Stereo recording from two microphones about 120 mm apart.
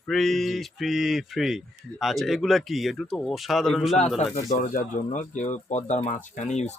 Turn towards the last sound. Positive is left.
turn(degrees=75)  # may be behind; listen again after turning